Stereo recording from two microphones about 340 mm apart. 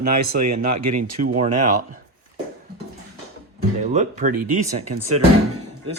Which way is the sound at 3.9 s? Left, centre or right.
Right.